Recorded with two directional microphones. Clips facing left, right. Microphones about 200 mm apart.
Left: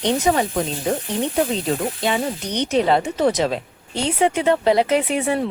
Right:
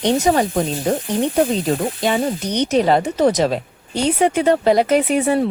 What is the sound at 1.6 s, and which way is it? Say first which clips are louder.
Speech: right 3 dB; 40° right (ahead or behind).